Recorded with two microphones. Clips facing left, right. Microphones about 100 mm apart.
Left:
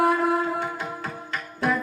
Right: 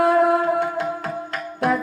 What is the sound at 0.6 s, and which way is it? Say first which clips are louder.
Music: right 7 dB; 70° right (ahead or behind).